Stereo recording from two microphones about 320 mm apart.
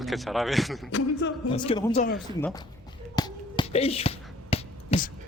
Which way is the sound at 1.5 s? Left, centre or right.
Centre.